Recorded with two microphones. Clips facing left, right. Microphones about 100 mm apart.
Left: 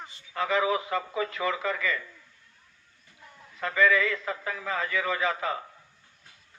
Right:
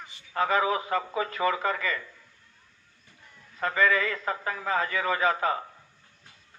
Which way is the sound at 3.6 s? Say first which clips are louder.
Left 1 dB; 40° right (ahead or behind).